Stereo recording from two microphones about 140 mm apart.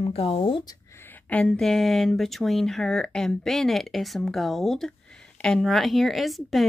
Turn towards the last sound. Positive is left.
turn(degrees=0)  # may be behind; listen again after turning